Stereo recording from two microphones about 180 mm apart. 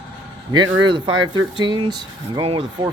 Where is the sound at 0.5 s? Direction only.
25° right (ahead or behind).